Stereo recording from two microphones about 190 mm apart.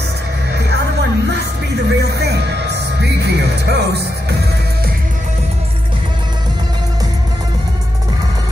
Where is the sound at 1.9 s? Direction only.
60° right (ahead or behind).